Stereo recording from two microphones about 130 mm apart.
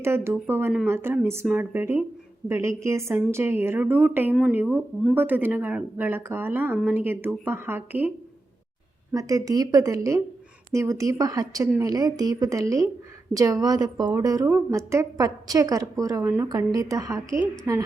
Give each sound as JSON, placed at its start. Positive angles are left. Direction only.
{"t": 0.0, "sound": "a woman's voice", "side_deg": -20}
{"t": 9.1, "sound": "a woman's voice", "side_deg": -25}